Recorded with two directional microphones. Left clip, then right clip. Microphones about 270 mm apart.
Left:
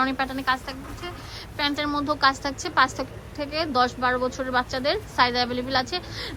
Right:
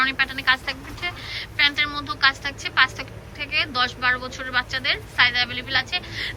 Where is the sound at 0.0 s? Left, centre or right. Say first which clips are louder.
Right 4 dB; centre.